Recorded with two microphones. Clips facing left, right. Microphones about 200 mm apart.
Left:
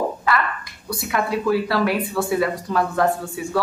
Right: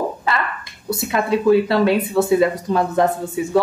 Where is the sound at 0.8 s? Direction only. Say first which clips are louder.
Right 3 dB; 25° right (ahead or behind).